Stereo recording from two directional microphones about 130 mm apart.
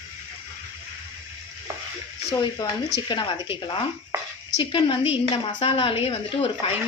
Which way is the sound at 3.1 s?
40° left (ahead or behind).